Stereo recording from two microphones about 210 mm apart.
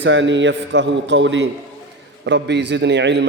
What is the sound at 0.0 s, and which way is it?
A man's voice, 60° right (ahead or behind).